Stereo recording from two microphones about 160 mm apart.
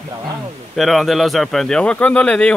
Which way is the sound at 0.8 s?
Centre (ahead or behind).